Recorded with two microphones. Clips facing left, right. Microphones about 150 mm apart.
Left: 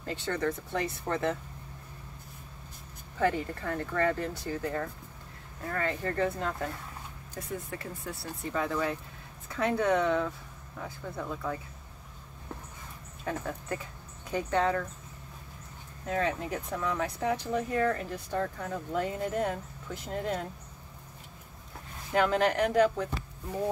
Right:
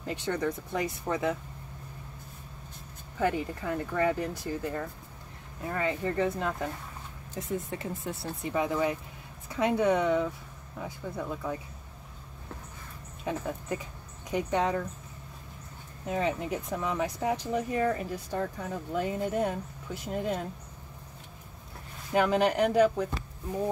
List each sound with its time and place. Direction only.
0.0 s speech: 15° right (ahead or behind)
3.2 s speech: 10° right (ahead or behind)
13.2 s speech: 15° right (ahead or behind)
16.1 s speech: 15° right (ahead or behind)
22.1 s speech: 10° right (ahead or behind)